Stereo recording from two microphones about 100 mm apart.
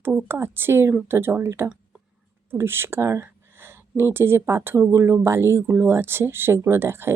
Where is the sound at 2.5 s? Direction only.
25° right (ahead or behind).